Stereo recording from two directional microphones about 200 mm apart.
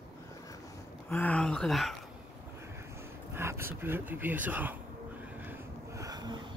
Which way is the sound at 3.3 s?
10° right (ahead or behind).